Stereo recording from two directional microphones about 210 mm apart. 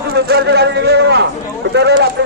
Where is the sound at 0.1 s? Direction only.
50° right (ahead or behind).